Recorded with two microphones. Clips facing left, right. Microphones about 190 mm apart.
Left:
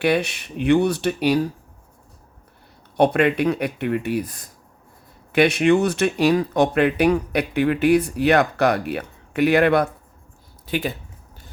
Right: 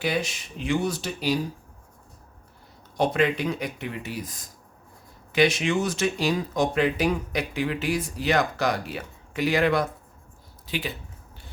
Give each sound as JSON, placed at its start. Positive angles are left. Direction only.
{"t": 0.0, "sound": "speech", "side_deg": 65}
{"t": 3.0, "sound": "speech", "side_deg": 60}
{"t": 10.7, "sound": "speech", "side_deg": 50}